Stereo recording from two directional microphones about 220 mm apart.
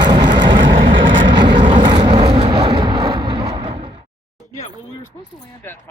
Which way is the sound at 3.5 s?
25° right (ahead or behind).